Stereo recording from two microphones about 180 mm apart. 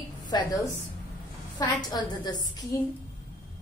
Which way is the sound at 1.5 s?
25° left (ahead or behind).